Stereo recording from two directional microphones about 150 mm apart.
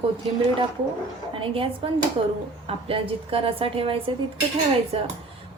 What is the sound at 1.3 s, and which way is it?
A woman's voice, 35° right (ahead or behind).